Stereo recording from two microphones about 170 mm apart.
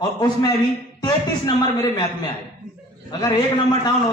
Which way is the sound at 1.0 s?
25° left (ahead or behind).